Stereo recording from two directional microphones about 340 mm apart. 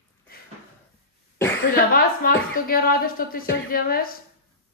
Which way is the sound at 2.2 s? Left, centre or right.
Left.